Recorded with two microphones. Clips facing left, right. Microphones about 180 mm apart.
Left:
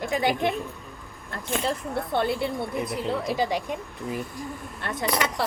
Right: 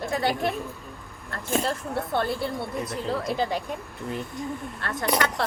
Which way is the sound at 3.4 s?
10° left (ahead or behind).